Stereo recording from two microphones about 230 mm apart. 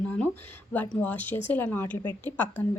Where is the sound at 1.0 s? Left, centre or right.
Centre.